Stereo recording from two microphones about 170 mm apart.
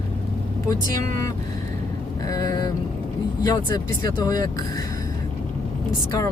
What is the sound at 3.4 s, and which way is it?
Speech, 20° left (ahead or behind).